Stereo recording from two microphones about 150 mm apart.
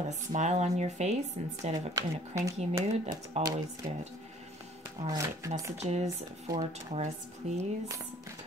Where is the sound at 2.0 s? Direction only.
20° right (ahead or behind).